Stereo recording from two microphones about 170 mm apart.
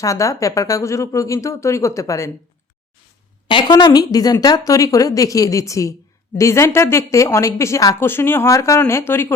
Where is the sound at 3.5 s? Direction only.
25° left (ahead or behind).